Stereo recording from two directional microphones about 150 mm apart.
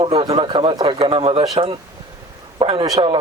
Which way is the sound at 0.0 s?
40° right (ahead or behind).